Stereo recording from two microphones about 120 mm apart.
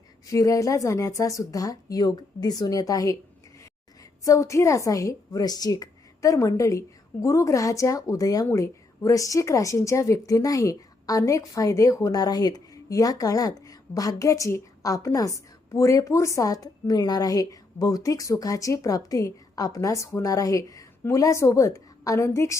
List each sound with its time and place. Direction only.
0.3 s a woman's voice: 30° left (ahead or behind)
4.2 s a woman's voice: 25° left (ahead or behind)